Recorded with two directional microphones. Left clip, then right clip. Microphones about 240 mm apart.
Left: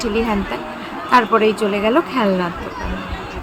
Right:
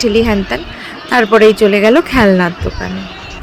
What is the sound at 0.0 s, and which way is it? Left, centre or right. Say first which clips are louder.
Speech: right 7 dB; right.